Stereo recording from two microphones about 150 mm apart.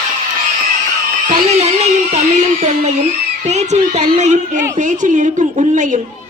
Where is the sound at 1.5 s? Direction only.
45° right (ahead or behind).